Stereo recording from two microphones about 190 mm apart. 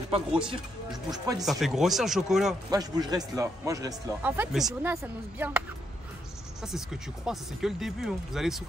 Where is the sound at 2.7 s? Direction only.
20° right (ahead or behind).